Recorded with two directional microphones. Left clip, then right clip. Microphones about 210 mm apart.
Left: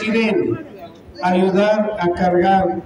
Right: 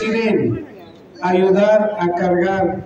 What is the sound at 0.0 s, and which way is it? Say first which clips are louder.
A man's voice: right 1 dB; 55° left (ahead or behind).